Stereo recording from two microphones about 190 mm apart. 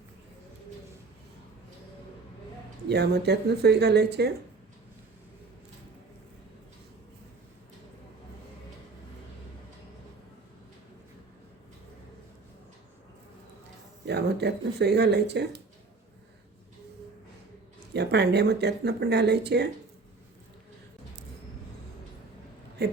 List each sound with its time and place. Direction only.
2.9 s speech: 60° right (ahead or behind)
14.0 s speech: 60° right (ahead or behind)
17.9 s speech: 60° right (ahead or behind)